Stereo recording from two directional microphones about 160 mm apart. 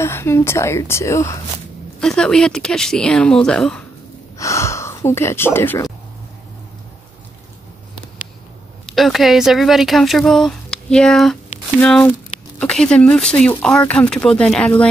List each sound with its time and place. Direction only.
0.0 s speech: 15° left (ahead or behind)
2.0 s speech: 5° left (ahead or behind)
4.4 s speech: 20° left (ahead or behind)
8.9 s speech: centre (ahead or behind)